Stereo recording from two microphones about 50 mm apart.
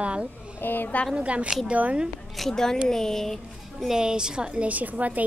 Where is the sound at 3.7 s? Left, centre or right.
Centre.